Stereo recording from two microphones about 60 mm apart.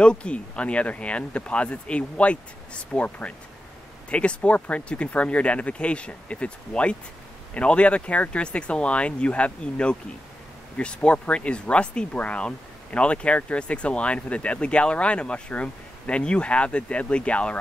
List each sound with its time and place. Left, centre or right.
0.0 s speech: centre